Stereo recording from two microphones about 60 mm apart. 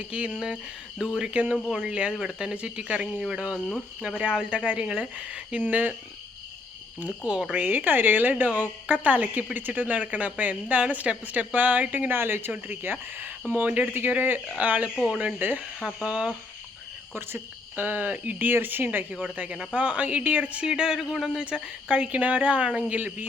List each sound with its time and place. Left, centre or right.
0.1 s a woman's voice: right
7.3 s speech: centre
7.5 s a woman's voice: right
14.9 s speech: centre
15.4 s speech: right
15.8 s speech: centre
16.0 s speech: centre
17.2 s a woman's voice: right; by 21.2 s centre
21.3 s a woman's voice: centre